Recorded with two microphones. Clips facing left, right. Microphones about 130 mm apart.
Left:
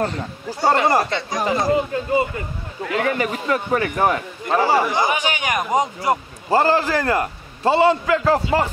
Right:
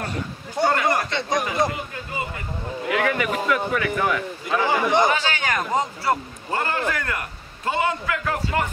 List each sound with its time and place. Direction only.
0.7 s a man's voice: 30° left (ahead or behind)
5.0 s speech: 15° left (ahead or behind)
6.5 s a man's voice: 30° left (ahead or behind)